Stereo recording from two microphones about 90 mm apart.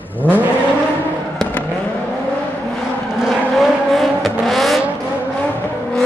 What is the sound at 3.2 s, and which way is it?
Vehicle, centre (ahead or behind).